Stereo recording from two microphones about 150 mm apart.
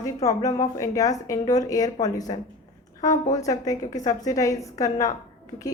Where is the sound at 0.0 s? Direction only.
20° left (ahead or behind).